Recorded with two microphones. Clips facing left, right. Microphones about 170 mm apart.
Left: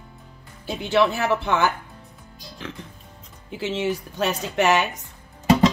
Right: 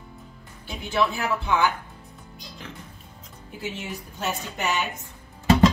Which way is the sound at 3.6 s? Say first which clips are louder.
Left 9 dB; 90° left.